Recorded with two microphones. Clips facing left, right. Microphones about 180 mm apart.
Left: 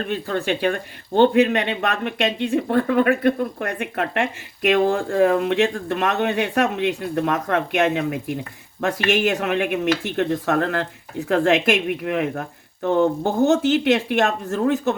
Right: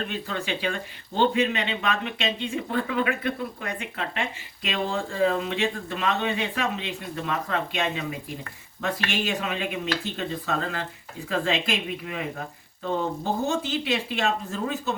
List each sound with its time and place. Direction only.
0.1 s speech: 50° left (ahead or behind); by 13.9 s 75° left (ahead or behind)
13.9 s speech: 55° left (ahead or behind); by 14.9 s 80° left